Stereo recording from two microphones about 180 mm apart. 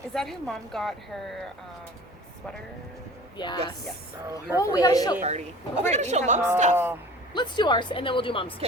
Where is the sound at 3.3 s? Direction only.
25° left (ahead or behind).